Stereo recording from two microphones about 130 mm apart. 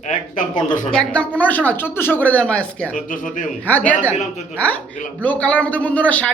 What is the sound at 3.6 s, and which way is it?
Speech, 10° left (ahead or behind).